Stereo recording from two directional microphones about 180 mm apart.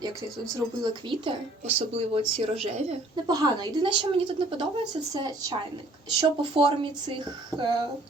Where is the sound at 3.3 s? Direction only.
20° right (ahead or behind).